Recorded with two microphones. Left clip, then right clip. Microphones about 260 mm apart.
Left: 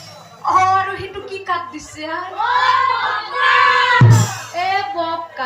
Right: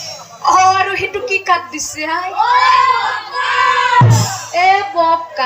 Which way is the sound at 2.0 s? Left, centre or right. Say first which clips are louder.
Right 6 dB; right.